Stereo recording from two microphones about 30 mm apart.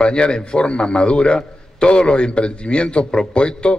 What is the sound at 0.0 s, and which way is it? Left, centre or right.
A man's voice, left.